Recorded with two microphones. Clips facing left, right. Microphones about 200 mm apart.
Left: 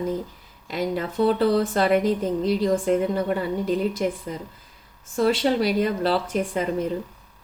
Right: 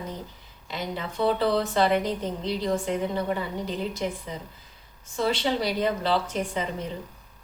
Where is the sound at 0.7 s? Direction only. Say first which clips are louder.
Left 7 dB; 45° left (ahead or behind).